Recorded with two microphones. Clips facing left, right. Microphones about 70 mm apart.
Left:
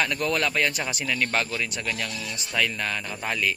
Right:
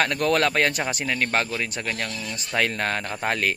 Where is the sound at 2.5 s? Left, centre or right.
Right.